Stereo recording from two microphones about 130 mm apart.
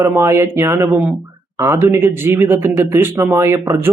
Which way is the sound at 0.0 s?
20° right (ahead or behind).